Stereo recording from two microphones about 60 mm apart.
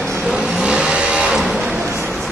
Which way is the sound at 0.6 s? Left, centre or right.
Centre.